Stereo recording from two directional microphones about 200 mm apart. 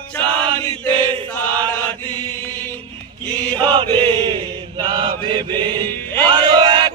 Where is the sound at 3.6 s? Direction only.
20° right (ahead or behind).